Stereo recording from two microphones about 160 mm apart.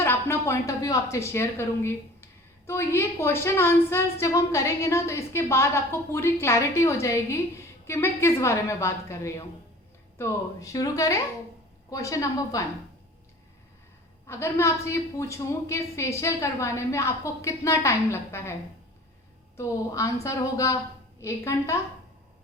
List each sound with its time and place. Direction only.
0.0 s a sound: 15° left (ahead or behind)
1.1 s a woman's voice: 15° left (ahead or behind)
14.3 s a woman's voice: 15° left (ahead or behind)
19.5 s a woman's voice: 20° left (ahead or behind)